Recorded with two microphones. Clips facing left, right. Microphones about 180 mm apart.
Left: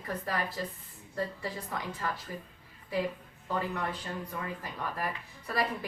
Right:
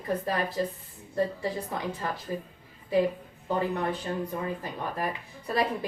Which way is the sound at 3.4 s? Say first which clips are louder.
Right 5 dB; 25° right (ahead or behind).